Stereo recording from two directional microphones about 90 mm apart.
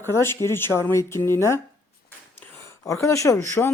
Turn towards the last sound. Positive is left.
turn(degrees=20)  # may be behind; listen again after turning